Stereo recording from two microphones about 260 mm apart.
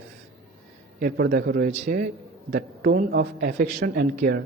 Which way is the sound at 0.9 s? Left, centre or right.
Right.